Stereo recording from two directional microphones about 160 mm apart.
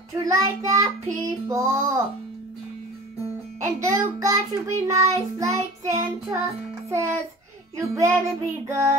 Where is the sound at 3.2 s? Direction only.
20° right (ahead or behind).